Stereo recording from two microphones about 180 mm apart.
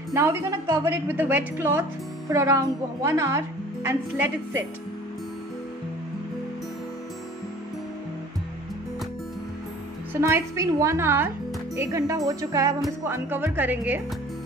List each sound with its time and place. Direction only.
0.1 s a woman's voice: 15° right (ahead or behind)
10.2 s a woman's voice: 15° right (ahead or behind)